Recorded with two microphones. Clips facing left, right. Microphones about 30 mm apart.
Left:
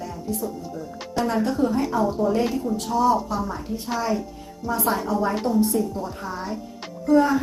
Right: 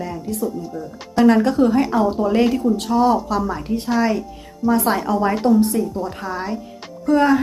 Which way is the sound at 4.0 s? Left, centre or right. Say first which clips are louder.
Right 4 dB; right.